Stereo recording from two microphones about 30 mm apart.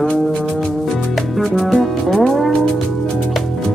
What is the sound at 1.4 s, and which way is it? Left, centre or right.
Music, centre.